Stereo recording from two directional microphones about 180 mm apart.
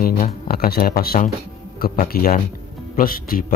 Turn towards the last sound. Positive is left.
turn(degrees=50)  # may be behind; listen again after turning